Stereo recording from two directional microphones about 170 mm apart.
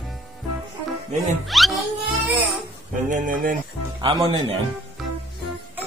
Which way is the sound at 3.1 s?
55° right (ahead or behind).